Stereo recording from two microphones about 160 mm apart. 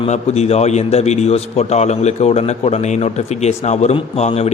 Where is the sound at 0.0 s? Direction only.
40° left (ahead or behind).